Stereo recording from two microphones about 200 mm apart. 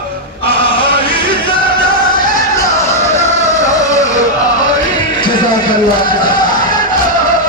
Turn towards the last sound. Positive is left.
turn(degrees=20)  # may be behind; listen again after turning